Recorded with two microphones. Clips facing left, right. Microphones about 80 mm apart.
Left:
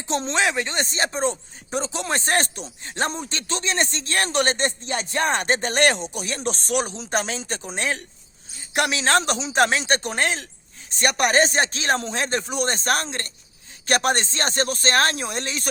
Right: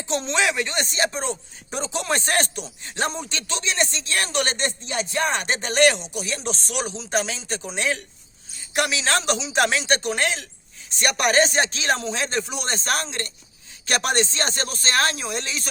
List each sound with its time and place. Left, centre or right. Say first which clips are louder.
0.1 s speech: left 1 dB; left